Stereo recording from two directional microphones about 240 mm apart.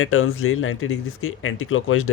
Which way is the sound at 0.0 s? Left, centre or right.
Left.